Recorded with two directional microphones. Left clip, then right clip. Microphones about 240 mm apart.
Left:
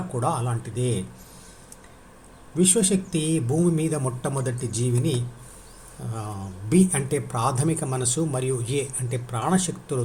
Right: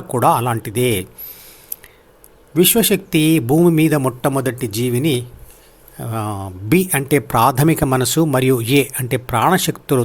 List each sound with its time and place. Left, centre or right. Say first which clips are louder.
0.1 s speech: right 13 dB; right
2.6 s speech: right 8 dB; right